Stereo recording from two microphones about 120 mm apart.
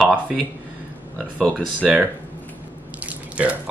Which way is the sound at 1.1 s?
5° left (ahead or behind).